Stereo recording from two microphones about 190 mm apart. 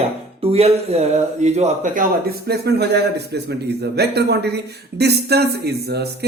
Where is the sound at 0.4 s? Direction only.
30° right (ahead or behind).